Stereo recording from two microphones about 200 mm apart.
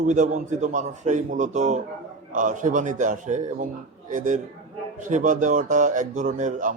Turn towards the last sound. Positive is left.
turn(degrees=-40)  # may be behind; listen again after turning